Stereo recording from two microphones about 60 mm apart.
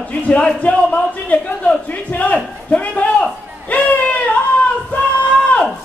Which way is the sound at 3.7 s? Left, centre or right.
Left.